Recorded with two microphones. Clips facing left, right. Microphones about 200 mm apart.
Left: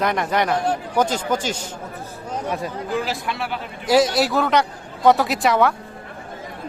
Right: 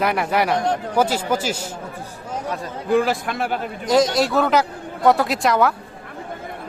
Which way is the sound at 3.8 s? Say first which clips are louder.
Even; 5° left (ahead or behind).